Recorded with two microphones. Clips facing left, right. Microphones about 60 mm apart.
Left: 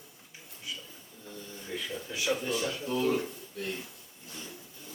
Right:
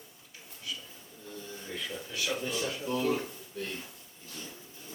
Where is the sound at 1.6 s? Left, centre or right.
Centre.